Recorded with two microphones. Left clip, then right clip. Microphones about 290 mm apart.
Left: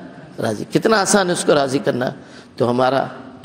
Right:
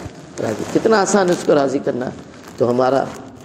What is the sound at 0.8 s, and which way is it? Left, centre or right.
A man's voice, left.